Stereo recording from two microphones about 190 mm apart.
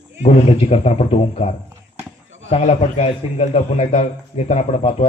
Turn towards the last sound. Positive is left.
turn(degrees=30)  # may be behind; listen again after turning